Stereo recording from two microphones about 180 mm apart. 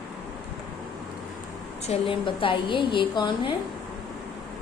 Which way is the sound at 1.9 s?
30° left (ahead or behind).